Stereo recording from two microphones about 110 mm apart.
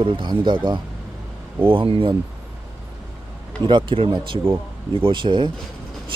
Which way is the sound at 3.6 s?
50° right (ahead or behind).